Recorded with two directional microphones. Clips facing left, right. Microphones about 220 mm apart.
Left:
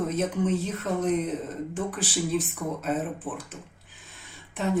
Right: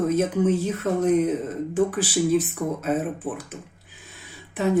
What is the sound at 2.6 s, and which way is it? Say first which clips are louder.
Speech: right 5 dB; 25° right (ahead or behind).